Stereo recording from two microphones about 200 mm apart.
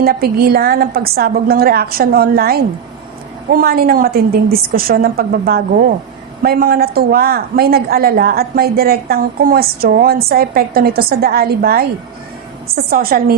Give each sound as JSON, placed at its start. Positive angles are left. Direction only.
{"t": 0.0, "sound": "a woman's voice", "side_deg": -50}